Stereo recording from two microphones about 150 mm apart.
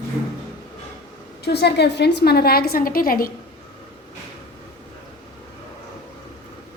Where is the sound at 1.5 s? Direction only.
90° left; by 3.2 s 75° left (ahead or behind).